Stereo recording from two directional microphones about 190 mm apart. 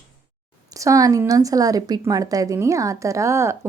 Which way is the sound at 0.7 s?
15° right (ahead or behind).